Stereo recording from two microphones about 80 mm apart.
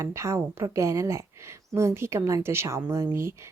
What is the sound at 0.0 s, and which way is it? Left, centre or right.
Speech, right.